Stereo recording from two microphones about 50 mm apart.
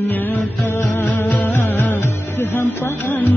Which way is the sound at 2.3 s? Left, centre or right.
Left.